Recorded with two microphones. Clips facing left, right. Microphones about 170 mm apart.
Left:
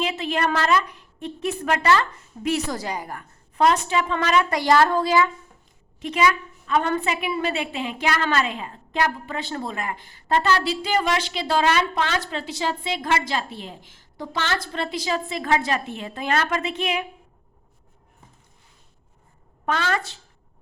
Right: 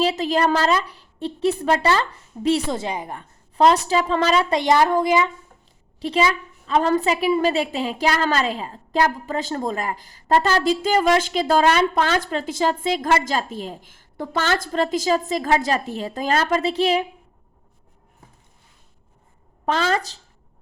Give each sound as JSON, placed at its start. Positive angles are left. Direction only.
{"t": 0.0, "sound": "a woman's voice", "side_deg": -35}
{"t": 6.0, "sound": "a woman's voice", "side_deg": -30}
{"t": 19.6, "sound": "a woman's voice", "side_deg": -30}